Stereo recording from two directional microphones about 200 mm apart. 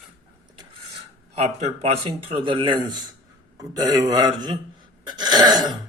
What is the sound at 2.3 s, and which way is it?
Speech, 25° right (ahead or behind).